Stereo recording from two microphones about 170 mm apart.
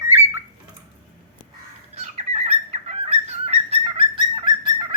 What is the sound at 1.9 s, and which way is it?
Bird, 40° right (ahead or behind).